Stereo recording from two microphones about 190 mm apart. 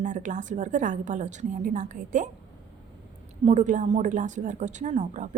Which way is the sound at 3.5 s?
40° right (ahead or behind).